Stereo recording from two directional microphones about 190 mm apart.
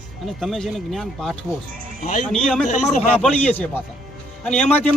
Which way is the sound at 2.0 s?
40° left (ahead or behind).